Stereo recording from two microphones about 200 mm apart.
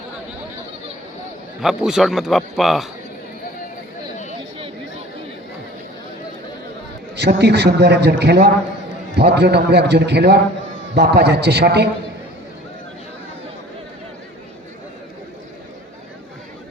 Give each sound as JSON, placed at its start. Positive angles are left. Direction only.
{"t": 1.6, "sound": "a man's voice", "side_deg": 0}
{"t": 4.4, "sound": "chatter", "side_deg": -25}
{"t": 7.2, "sound": "a man's voice", "side_deg": -55}